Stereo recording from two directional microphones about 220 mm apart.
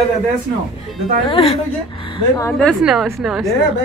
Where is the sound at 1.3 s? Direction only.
25° left (ahead or behind).